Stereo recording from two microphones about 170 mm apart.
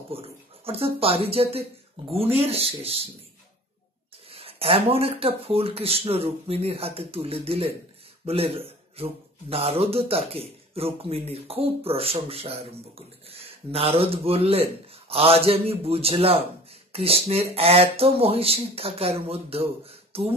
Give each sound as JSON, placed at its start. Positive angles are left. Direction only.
{"t": 0.1, "sound": "speech", "side_deg": -35}
{"t": 4.3, "sound": "speech", "side_deg": -35}